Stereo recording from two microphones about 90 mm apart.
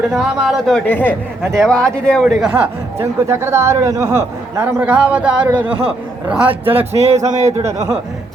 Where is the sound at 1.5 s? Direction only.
5° left (ahead or behind).